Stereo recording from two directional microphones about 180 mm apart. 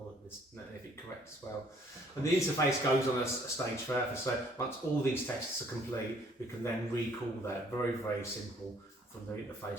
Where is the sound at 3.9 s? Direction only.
10° left (ahead or behind).